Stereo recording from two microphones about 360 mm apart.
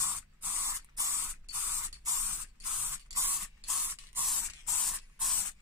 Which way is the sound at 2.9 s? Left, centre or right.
Centre.